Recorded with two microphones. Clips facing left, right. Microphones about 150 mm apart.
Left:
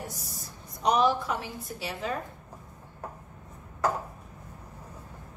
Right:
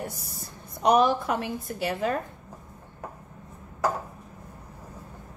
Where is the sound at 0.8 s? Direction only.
55° right (ahead or behind).